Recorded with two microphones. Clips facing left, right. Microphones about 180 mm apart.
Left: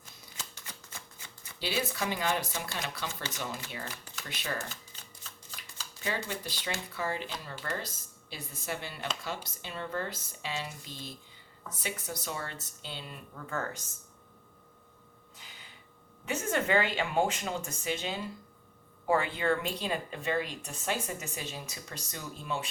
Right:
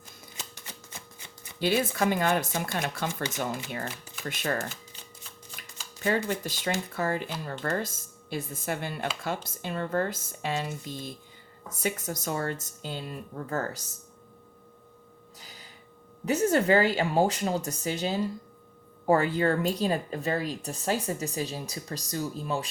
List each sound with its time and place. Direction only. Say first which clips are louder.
0.3 s typewriter: right 2 dB; 20° right (ahead or behind)
1.5 s speech: right 7 dB; 50° right (ahead or behind)
6.0 s speech: right 8 dB; 50° right (ahead or behind)
15.4 s gasp: right 3 dB; 40° right (ahead or behind)
16.2 s speech: right 8 dB; 35° right (ahead or behind)